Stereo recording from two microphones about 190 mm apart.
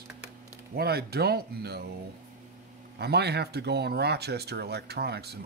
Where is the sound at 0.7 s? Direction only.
55° right (ahead or behind).